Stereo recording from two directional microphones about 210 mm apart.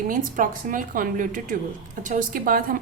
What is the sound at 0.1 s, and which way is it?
A woman's voice, 40° right (ahead or behind).